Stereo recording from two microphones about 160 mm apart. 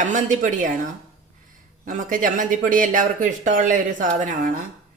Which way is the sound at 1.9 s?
55° right (ahead or behind).